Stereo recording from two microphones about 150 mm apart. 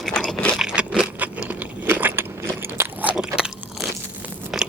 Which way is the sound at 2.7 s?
10° right (ahead or behind).